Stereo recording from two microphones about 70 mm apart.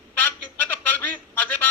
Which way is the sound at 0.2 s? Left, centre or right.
Left.